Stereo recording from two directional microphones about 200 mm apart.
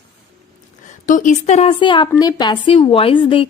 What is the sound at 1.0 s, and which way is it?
A woman's voice, 40° left (ahead or behind).